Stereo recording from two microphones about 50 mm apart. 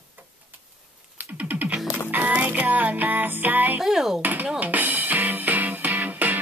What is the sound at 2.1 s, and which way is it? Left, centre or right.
Music, right.